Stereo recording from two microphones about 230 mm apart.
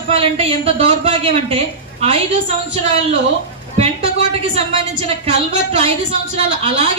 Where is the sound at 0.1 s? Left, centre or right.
Right.